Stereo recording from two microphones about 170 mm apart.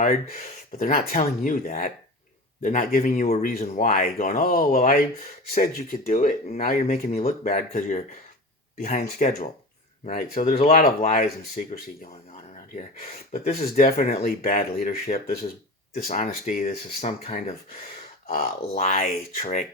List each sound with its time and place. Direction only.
0.0 s speech: 55° left (ahead or behind)
0.3 s speech: 45° left (ahead or behind)
10.6 s speech: 40° left (ahead or behind)
13.6 s speech: 60° left (ahead or behind)